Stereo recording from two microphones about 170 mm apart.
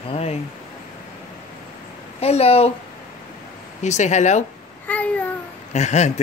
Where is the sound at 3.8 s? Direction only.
45° left (ahead or behind).